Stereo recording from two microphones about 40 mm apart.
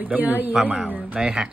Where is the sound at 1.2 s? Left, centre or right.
Right.